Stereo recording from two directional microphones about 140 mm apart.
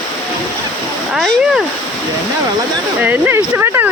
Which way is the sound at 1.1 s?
Centre (ahead or behind).